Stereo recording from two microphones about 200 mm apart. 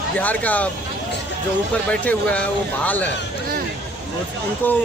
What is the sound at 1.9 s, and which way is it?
Speech, 5° left (ahead or behind).